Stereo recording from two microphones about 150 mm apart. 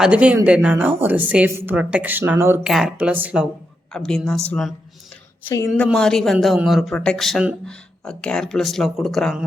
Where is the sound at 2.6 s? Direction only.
5° right (ahead or behind).